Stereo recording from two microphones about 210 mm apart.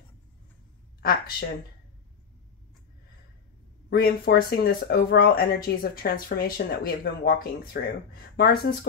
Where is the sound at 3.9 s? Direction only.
45° left (ahead or behind).